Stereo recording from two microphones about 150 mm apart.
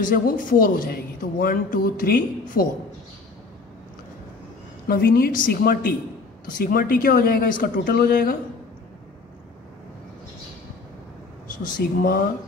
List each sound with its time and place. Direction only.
0.0 s a man's voice: 65° left (ahead or behind)
4.8 s a woman's voice: 90° left
6.6 s a man's voice: 70° left (ahead or behind)
11.6 s a man's voice: 70° left (ahead or behind)